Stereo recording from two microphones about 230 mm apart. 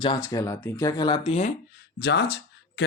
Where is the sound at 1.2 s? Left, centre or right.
Left.